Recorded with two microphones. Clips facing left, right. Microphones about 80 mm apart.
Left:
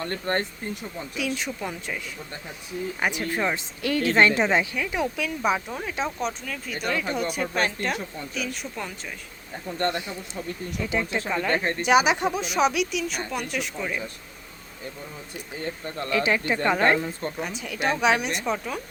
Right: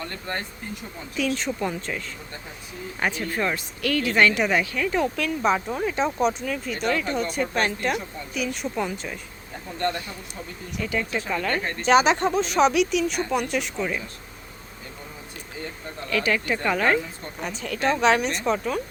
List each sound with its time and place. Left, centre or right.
0.3 s speech: left
1.1 s speech: centre
3.0 s speech: centre
4.8 s speech: centre
10.8 s speech: centre
16.1 s speech: left
17.4 s speech: centre